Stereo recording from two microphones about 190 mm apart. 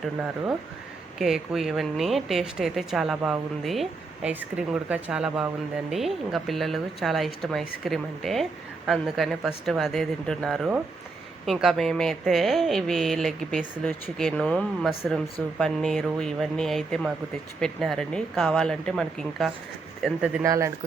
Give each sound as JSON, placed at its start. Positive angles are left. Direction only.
{"t": 0.0, "sound": "speech", "side_deg": -5}
{"t": 20.4, "sound": "speech", "side_deg": -15}